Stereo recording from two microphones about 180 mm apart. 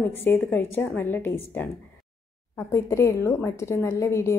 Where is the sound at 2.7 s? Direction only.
15° left (ahead or behind).